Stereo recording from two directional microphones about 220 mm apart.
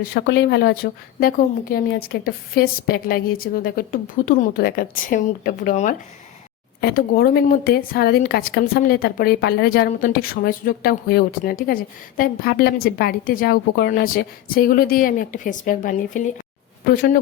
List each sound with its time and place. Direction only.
0.0 s a woman's voice: 45° left (ahead or behind)